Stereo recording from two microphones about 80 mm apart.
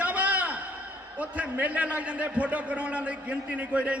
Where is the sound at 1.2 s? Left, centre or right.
Centre.